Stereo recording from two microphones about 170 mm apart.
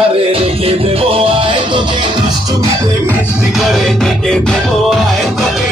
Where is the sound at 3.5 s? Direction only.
Centre (ahead or behind).